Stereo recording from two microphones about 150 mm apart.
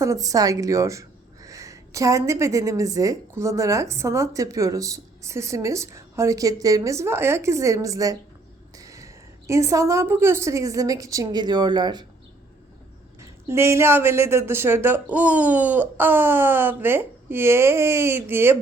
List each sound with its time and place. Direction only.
0.0 s a woman's voice: 20° right (ahead or behind)
13.5 s speech: 15° right (ahead or behind)